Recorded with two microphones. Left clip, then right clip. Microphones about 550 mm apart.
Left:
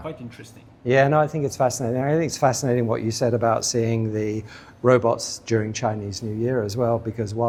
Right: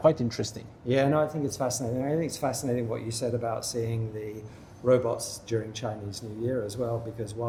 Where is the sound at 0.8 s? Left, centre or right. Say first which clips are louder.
Left 7 dB; left.